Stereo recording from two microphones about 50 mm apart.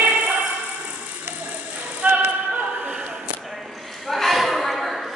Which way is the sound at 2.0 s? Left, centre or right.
Right.